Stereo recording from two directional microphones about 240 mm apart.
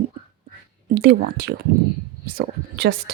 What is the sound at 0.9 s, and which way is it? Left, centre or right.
Speech, right.